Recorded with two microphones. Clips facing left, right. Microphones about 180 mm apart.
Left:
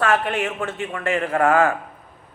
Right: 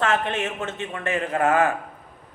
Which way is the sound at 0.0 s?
20° right (ahead or behind).